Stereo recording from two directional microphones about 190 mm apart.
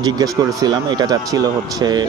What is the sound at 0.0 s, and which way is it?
Speech, 20° right (ahead or behind).